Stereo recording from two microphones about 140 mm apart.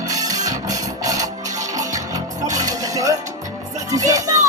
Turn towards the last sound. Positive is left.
turn(degrees=-25)  # may be behind; listen again after turning